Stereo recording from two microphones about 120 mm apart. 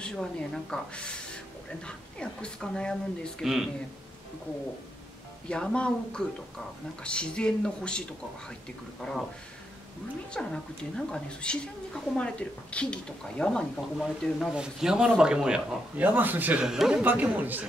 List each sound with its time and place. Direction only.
0.0 s speech: 5° left (ahead or behind)
5.5 s a woman's voice: 10° left (ahead or behind)
9.0 s speech: 5° left (ahead or behind)
10.3 s a woman's voice: 5° left (ahead or behind); by 16.6 s 15° right (ahead or behind)
16.6 s speech: 5° right (ahead or behind)
17.0 s speech: 15° right (ahead or behind)